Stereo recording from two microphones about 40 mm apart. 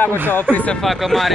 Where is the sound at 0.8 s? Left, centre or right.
Centre.